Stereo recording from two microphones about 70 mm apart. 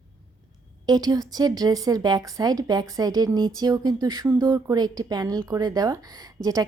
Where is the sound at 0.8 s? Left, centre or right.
Right.